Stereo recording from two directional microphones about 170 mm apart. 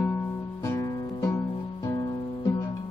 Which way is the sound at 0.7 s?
25° left (ahead or behind).